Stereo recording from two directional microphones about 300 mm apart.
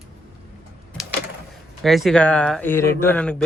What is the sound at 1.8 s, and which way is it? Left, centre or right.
Speech, centre.